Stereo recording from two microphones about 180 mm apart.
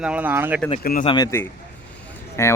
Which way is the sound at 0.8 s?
55° left (ahead or behind).